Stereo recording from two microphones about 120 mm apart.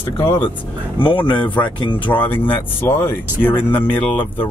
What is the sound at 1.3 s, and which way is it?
Speech, 15° left (ahead or behind).